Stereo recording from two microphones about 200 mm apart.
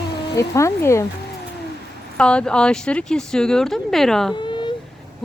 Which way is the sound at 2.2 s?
5° left (ahead or behind).